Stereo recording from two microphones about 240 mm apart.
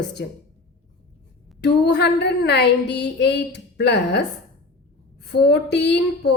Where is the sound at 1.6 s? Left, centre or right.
Left.